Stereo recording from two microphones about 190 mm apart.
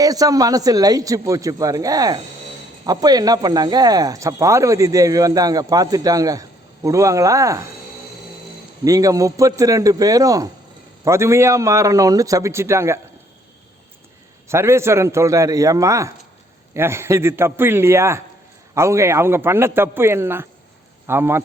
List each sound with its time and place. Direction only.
0.0 s a man's voice: 20° right (ahead or behind)
8.8 s a man's voice: 20° right (ahead or behind)
14.4 s a man's voice: 15° right (ahead or behind)